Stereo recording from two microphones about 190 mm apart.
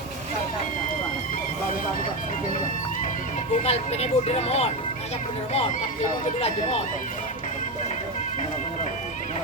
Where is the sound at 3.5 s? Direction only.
35° left (ahead or behind).